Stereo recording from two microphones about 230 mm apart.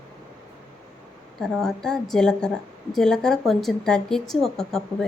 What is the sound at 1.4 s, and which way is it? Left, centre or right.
Speech, centre.